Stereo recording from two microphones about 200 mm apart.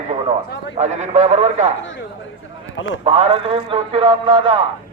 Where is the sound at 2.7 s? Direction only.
75° left (ahead or behind).